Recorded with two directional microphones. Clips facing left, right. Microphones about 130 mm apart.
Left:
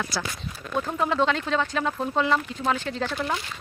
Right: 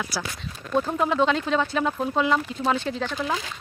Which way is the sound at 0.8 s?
10° right (ahead or behind).